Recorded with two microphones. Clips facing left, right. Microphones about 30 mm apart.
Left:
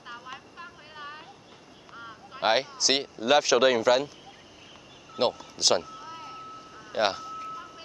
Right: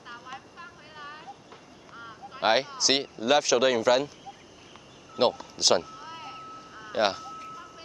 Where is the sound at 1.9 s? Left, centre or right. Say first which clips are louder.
Even; centre.